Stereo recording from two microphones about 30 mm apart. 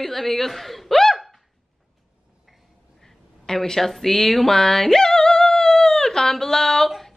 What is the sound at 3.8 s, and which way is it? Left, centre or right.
Singing, centre.